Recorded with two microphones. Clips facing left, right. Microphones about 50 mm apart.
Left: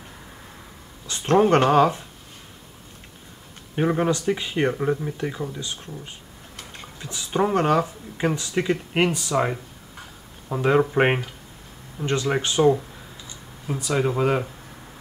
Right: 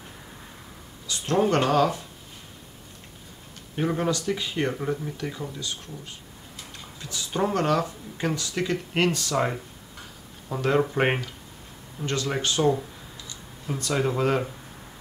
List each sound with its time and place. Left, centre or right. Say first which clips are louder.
1.0 s speech: left 5 dB; left
3.7 s speech: left 4 dB; left
13.7 s speech: left 2 dB; centre